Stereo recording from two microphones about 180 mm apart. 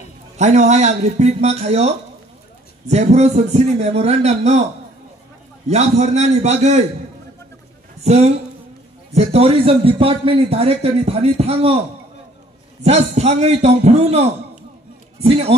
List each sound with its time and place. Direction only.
0.4 s a man's voice: 40° right (ahead or behind)
5.7 s a man's voice: 40° right (ahead or behind)
8.0 s a man's voice: 35° right (ahead or behind)
12.8 s a man's voice: 35° right (ahead or behind)